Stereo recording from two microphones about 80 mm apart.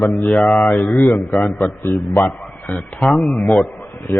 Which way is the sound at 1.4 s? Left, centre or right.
Left.